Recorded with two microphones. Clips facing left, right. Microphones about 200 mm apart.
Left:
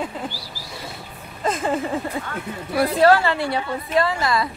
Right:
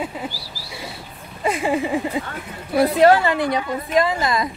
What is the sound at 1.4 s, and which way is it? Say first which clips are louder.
A woman's voice: right 2 dB; 10° right (ahead or behind).